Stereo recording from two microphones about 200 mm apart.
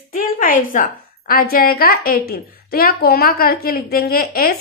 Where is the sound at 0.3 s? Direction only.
40° left (ahead or behind).